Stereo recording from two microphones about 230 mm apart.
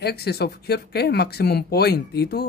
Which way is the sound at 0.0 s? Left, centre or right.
Left.